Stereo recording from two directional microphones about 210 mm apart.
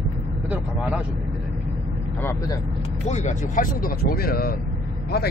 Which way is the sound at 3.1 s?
35° left (ahead or behind).